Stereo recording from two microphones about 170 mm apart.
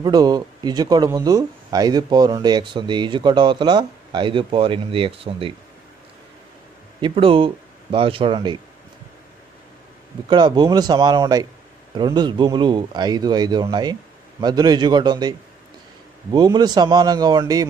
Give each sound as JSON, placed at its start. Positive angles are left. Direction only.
{"t": 0.0, "sound": "speech", "side_deg": -25}
{"t": 7.0, "sound": "speech", "side_deg": -30}
{"t": 10.3, "sound": "speech", "side_deg": -25}